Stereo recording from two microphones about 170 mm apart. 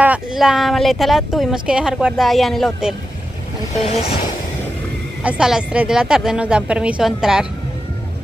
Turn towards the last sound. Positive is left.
turn(degrees=-5)  # may be behind; listen again after turning